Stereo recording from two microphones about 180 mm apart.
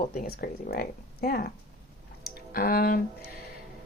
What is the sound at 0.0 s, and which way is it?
A woman's voice, 55° left (ahead or behind).